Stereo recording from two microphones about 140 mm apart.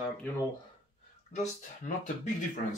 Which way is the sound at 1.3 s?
60° left (ahead or behind).